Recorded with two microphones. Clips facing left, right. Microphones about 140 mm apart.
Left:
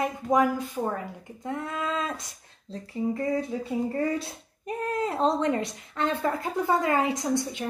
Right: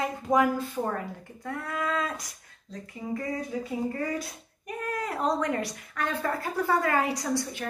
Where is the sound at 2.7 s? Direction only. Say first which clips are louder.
Left 3 dB; 30° left (ahead or behind).